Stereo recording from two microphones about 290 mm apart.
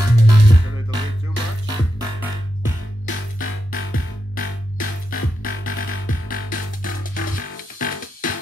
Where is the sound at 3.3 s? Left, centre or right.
Left.